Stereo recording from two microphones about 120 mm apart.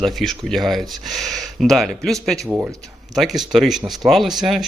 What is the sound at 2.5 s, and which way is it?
Speech, 20° right (ahead or behind).